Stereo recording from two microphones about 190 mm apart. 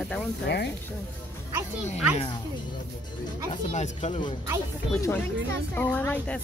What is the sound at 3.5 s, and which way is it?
Speech, 35° left (ahead or behind).